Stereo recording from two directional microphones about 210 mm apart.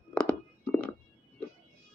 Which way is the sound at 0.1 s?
5° left (ahead or behind).